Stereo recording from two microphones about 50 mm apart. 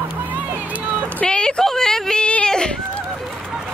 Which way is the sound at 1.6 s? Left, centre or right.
Centre.